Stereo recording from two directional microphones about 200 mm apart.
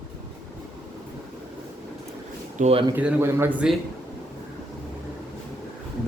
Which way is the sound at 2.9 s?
10° right (ahead or behind).